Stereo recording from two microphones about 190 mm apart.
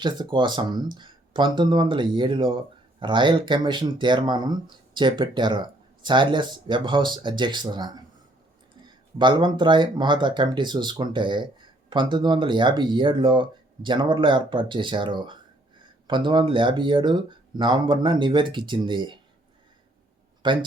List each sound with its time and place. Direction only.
0.0 s speech: 25° right (ahead or behind)
9.1 s speech: 25° right (ahead or behind)
20.4 s speech: 25° right (ahead or behind)